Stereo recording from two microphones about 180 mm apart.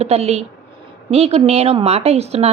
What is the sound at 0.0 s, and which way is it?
A woman's voice, 35° right (ahead or behind).